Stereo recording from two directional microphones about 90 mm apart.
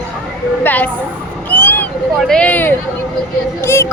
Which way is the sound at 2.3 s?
15° left (ahead or behind).